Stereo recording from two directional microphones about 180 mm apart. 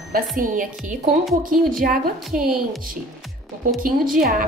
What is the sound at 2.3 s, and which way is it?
Speech, 5° right (ahead or behind).